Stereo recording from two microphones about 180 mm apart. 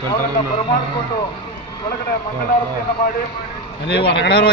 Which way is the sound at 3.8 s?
65° left (ahead or behind).